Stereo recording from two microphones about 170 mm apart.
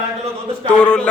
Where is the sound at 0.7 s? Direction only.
5° left (ahead or behind).